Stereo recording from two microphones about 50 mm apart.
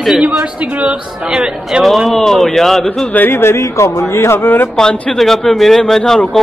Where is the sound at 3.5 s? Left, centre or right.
Left.